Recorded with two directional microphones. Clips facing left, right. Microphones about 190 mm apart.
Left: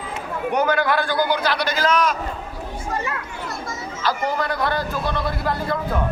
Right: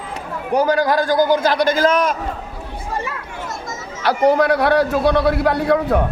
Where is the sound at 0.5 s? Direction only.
35° right (ahead or behind); by 2.1 s 50° right (ahead or behind).